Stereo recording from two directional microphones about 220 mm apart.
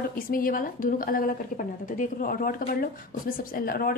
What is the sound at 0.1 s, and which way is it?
A woman's voice, 40° left (ahead or behind).